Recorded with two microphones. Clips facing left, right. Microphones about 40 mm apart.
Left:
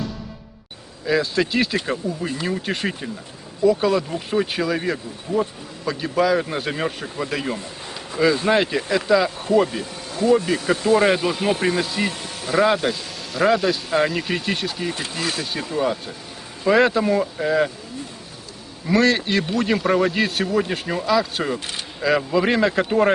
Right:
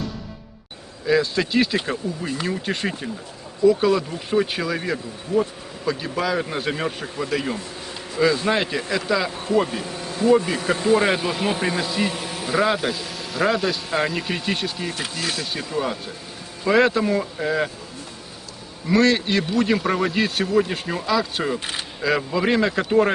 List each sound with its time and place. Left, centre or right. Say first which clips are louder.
1.0 s speech: even; centre
10.2 s speech: even; centre
10.9 s speech: left 3 dB; centre
15.1 s speech: left 1 dB; left
15.5 s speech: left 3 dB; centre
18.9 s speech: even; centre